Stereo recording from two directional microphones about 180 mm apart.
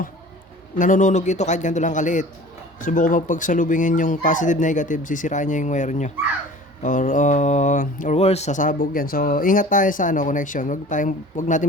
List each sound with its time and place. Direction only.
0.8 s speech: 45° left (ahead or behind)